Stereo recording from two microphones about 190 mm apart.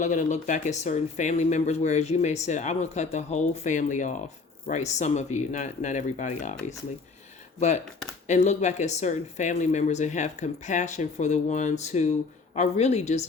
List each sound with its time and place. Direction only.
0.0 s speech: 40° left (ahead or behind)
8.3 s speech: 35° left (ahead or behind)